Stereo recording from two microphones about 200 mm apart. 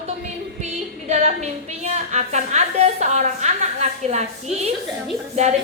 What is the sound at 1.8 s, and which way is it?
A woman's voice, 35° right (ahead or behind).